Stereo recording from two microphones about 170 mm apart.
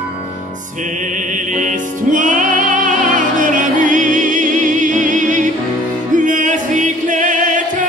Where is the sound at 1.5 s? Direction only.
50° right (ahead or behind).